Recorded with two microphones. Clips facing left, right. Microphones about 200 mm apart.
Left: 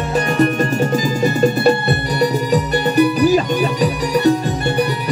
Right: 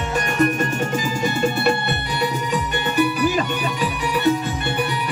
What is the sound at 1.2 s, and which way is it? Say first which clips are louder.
Music: left 6 dB; 35° left (ahead or behind).